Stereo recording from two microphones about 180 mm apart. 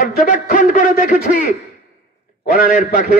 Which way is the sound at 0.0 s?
45° left (ahead or behind).